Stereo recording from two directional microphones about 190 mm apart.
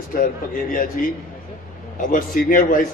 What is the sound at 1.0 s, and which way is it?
A man's voice, 45° left (ahead or behind).